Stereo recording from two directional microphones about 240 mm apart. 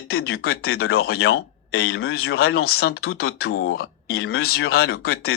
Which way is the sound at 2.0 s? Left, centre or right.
Left.